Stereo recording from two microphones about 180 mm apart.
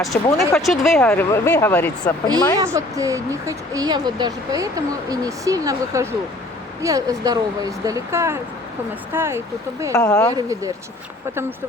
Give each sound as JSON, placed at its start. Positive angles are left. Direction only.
{"t": 0.3, "sound": "speech", "side_deg": 0}
{"t": 0.9, "sound": "speech", "side_deg": 10}
{"t": 2.2, "sound": "a woman's voice", "side_deg": -20}
{"t": 9.9, "sound": "speech", "side_deg": 20}
{"t": 10.3, "sound": "speech", "side_deg": -20}